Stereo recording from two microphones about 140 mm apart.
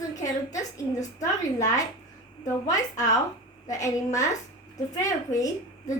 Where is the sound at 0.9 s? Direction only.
25° left (ahead or behind).